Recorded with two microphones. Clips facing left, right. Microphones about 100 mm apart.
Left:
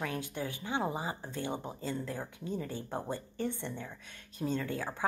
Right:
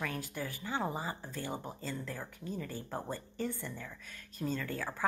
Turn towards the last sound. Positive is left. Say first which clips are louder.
# left 2 dB
turn(degrees=15)  # may be behind; listen again after turning